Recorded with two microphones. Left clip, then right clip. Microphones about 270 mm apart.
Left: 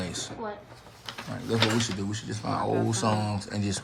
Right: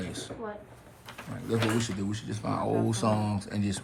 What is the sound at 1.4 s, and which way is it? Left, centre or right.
A man's voice, centre.